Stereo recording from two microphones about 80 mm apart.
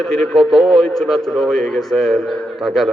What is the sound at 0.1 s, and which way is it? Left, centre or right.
A man's voice, centre.